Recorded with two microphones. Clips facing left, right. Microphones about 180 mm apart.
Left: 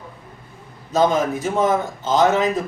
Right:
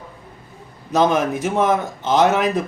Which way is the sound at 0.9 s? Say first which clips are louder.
Right 1 dB; 65° right (ahead or behind).